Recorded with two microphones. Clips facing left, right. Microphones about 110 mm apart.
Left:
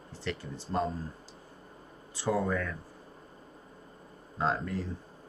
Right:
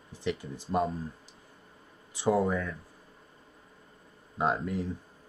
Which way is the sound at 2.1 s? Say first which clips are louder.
Right 3 dB; 20° right (ahead or behind).